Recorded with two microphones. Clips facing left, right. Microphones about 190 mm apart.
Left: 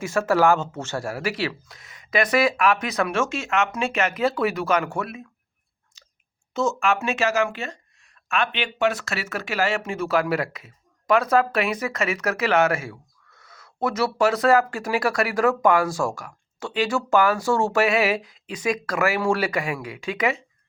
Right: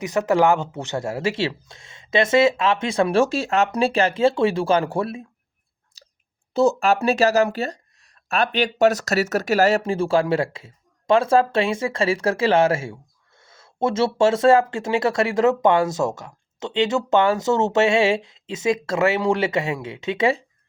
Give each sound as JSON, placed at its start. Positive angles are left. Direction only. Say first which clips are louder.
{"t": 0.0, "sound": "speech", "louder": "right 1 dB", "side_deg": -20}
{"t": 6.5, "sound": "speech", "louder": "right 5 dB", "side_deg": -35}